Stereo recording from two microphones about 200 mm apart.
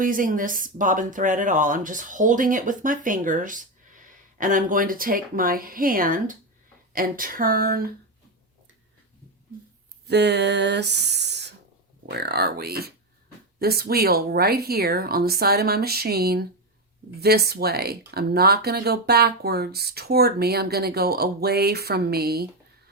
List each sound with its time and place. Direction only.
0.0 s speech: 45° right (ahead or behind)
10.1 s speech: 55° right (ahead or behind)